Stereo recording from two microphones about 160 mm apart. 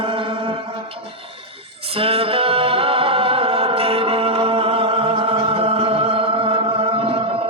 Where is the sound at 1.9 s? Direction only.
35° right (ahead or behind).